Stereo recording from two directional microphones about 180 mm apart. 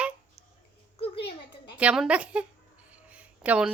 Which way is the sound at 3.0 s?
5° right (ahead or behind).